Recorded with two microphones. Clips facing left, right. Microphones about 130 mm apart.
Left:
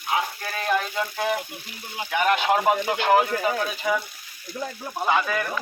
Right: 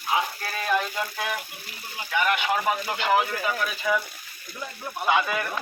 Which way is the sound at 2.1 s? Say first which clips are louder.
Left 3 dB; 40° left (ahead or behind).